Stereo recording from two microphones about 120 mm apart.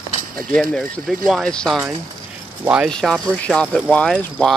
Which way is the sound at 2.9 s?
5° left (ahead or behind).